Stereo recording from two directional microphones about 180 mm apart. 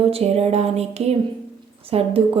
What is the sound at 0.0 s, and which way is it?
Speech, 35° right (ahead or behind).